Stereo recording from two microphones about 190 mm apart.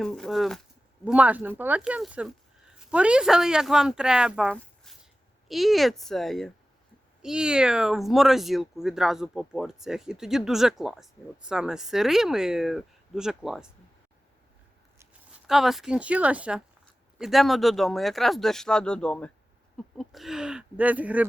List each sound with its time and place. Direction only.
0.0 s speech: centre (ahead or behind)
4.5 s a sound: centre (ahead or behind)
5.5 s speech: centre (ahead or behind)
15.4 s speech: centre (ahead or behind)